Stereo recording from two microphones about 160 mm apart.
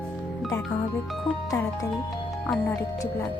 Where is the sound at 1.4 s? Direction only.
20° left (ahead or behind).